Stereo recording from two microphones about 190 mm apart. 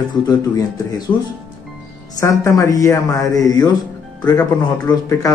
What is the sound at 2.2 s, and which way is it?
A woman's voice, 15° left (ahead or behind).